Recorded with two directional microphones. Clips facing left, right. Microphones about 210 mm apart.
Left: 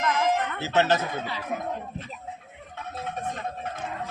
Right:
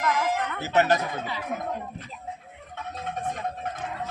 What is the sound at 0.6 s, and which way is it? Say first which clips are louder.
Speech: right 2 dB; 15° right (ahead or behind).